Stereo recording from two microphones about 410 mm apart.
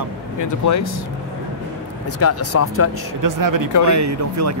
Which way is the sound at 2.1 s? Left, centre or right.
Left.